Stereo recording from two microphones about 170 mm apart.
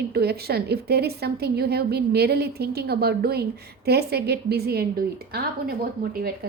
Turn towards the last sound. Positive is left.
turn(degrees=-60)  # may be behind; listen again after turning